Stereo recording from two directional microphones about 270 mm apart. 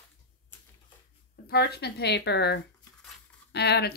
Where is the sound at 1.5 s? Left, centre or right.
Left.